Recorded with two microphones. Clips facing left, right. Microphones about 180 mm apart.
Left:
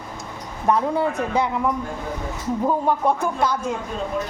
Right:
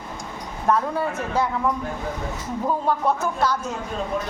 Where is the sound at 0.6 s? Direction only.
20° left (ahead or behind).